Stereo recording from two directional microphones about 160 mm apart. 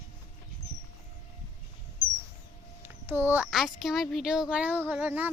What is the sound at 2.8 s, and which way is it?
A woman's voice, 15° right (ahead or behind).